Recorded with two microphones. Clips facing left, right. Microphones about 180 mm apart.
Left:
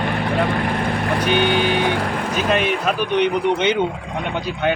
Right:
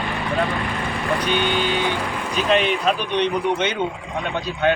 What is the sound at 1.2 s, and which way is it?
Speech, 60° left (ahead or behind).